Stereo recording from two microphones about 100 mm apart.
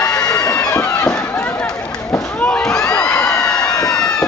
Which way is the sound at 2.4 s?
10° left (ahead or behind).